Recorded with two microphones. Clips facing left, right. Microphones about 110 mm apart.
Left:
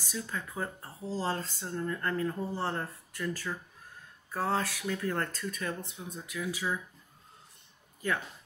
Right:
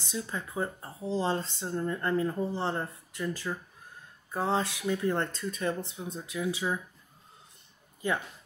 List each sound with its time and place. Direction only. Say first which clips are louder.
0.0 s speech: right 2 dB; 20° right (ahead or behind)